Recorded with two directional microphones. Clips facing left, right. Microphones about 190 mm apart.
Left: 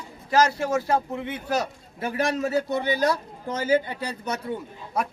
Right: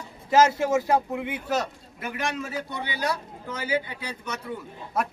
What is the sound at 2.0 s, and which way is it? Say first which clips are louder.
A man's voice: left 6 dB; 35° left (ahead or behind).